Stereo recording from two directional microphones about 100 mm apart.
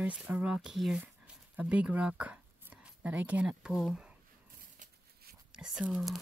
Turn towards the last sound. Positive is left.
turn(degrees=-5)  # may be behind; listen again after turning